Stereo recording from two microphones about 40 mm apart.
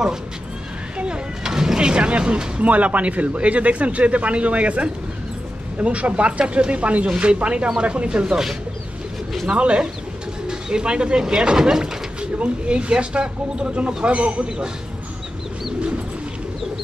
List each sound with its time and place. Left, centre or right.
0.9 s a sound: right
1.4 s speech: centre
2.6 s a man's voice: right
9.6 s speech: right